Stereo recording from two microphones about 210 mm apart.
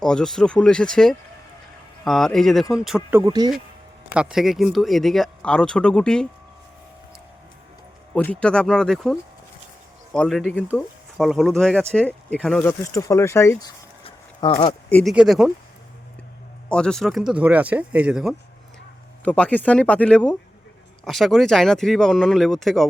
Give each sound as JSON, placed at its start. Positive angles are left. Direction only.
{"t": 0.0, "sound": "speech", "side_deg": 5}
{"t": 3.2, "sound": "speech", "side_deg": -20}
{"t": 4.1, "sound": "speech", "side_deg": -5}
{"t": 8.1, "sound": "speech", "side_deg": 5}
{"t": 14.0, "sound": "a sound", "side_deg": 25}
{"t": 14.8, "sound": "speech", "side_deg": 5}
{"t": 16.6, "sound": "speech", "side_deg": 5}